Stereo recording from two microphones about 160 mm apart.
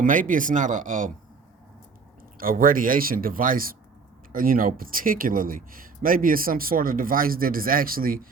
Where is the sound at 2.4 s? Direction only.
65° right (ahead or behind).